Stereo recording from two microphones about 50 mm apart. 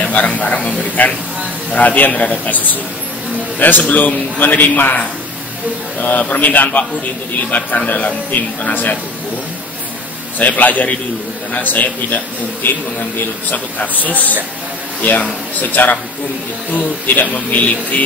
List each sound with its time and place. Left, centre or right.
0.0 s a man's voice: left
10.4 s a man's voice: left